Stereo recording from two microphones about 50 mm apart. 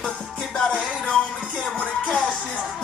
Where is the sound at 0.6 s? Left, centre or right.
Centre.